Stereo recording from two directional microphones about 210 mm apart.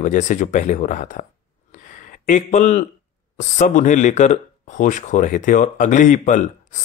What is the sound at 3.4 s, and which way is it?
A man's voice, 35° left (ahead or behind).